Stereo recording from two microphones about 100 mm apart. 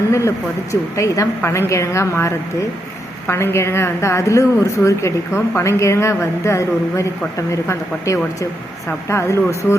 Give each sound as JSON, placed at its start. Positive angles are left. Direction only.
{"t": 0.1, "sound": "a woman's voice", "side_deg": 30}